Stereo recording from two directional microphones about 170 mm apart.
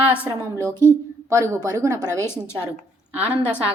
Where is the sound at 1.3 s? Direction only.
20° right (ahead or behind).